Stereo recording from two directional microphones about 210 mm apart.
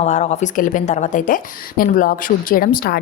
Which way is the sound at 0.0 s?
35° left (ahead or behind).